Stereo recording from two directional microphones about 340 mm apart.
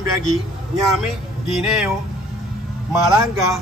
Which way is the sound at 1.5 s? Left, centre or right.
Centre.